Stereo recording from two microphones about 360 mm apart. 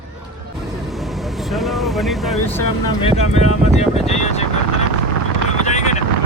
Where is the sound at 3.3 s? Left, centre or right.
Centre.